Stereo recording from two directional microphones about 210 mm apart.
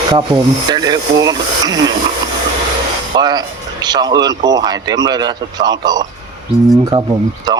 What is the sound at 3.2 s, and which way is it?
Speech, 20° right (ahead or behind).